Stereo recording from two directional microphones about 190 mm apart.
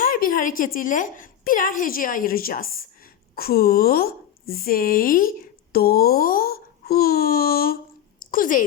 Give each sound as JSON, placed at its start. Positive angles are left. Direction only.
{"t": 0.0, "sound": "a woman's voice", "side_deg": 45}